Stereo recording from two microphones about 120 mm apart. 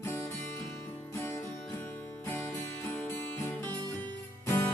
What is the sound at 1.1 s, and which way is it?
Music, 20° left (ahead or behind).